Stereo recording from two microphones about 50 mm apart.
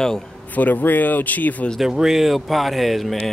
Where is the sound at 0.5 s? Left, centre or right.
Left.